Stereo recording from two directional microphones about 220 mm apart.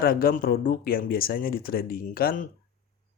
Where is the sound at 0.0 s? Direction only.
40° left (ahead or behind).